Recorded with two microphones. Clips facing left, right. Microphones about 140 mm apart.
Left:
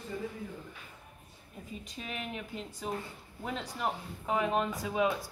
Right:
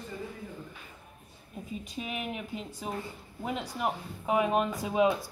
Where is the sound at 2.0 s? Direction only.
15° right (ahead or behind).